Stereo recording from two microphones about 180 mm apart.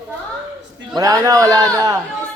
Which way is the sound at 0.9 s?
20° right (ahead or behind).